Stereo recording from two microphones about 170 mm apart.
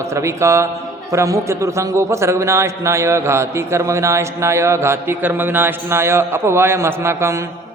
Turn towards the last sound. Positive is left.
turn(degrees=-15)  # may be behind; listen again after turning